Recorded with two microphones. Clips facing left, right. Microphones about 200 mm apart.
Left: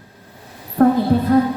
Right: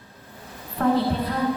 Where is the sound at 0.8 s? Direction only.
45° left (ahead or behind).